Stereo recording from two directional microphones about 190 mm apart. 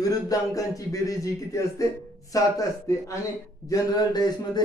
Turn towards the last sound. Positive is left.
turn(degrees=20)  # may be behind; listen again after turning